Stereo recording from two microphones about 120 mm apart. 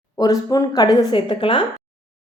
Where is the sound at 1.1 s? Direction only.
45° left (ahead or behind).